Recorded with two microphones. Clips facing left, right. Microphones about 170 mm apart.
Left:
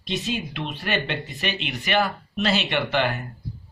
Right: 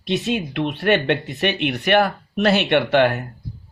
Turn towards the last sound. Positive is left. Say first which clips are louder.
# right 7 dB
turn(degrees=-65)  # may be behind; listen again after turning